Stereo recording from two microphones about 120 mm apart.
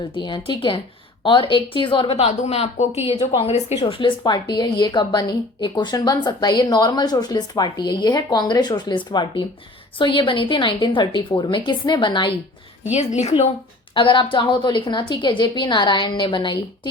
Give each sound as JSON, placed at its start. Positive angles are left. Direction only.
{"t": 0.2, "sound": "a woman's voice", "side_deg": 40}
{"t": 3.8, "sound": "a woman's voice", "side_deg": 45}
{"t": 12.9, "sound": "a woman's voice", "side_deg": 70}
{"t": 13.9, "sound": "a woman's voice", "side_deg": 40}